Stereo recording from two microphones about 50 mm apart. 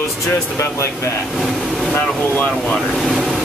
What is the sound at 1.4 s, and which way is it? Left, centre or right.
Vehicle, centre.